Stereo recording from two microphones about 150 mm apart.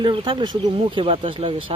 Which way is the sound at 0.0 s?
30° right (ahead or behind).